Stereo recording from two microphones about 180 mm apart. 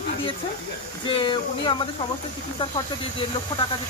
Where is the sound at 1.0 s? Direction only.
30° left (ahead or behind).